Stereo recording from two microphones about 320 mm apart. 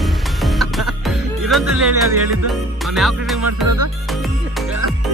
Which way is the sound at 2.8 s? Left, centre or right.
Centre.